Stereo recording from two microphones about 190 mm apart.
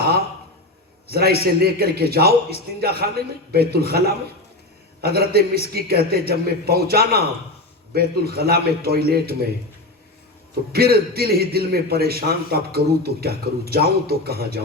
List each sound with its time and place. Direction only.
1.0 s a man's voice: 55° right (ahead or behind)
10.7 s a man's voice: 55° right (ahead or behind)